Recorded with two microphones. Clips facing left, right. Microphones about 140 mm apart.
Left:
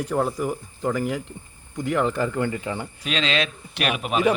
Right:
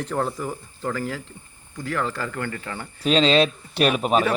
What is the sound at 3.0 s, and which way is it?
Speech, 35° right (ahead or behind).